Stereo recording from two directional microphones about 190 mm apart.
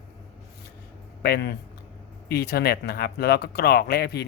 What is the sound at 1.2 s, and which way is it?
Speech, 55° left (ahead or behind).